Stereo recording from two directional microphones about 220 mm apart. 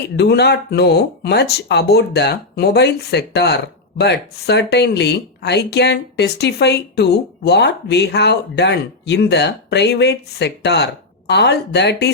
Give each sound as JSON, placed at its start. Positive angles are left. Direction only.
{"t": 0.2, "sound": "speech", "side_deg": 50}